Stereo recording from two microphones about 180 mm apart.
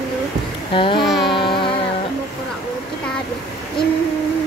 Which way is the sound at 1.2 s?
25° left (ahead or behind).